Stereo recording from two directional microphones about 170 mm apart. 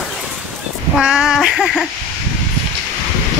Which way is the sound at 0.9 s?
5° right (ahead or behind).